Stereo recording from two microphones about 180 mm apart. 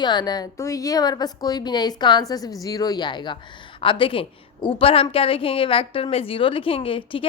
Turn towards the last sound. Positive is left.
turn(degrees=30)  # may be behind; listen again after turning